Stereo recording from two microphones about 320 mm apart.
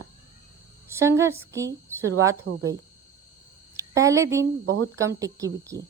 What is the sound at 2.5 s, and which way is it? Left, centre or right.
Speech, right.